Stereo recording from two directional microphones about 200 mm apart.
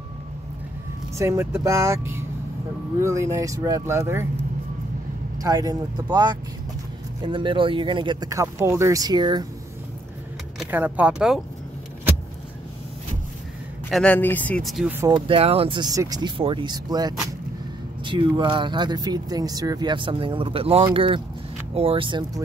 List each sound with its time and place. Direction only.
1.1 s speech: 15° right (ahead or behind)
5.4 s speech: 20° right (ahead or behind)
10.6 s speech: 10° right (ahead or behind)
13.8 s speech: 5° left (ahead or behind)
15.0 s speech: 20° right (ahead or behind)